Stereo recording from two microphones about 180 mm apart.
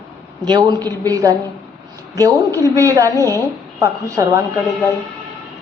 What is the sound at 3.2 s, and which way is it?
Speech, 15° left (ahead or behind).